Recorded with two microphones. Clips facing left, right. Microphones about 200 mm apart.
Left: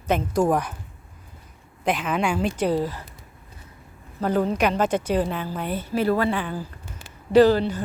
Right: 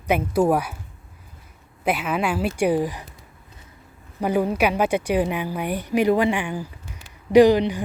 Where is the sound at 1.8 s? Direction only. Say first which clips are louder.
Right 1 dB; 5° right (ahead or behind).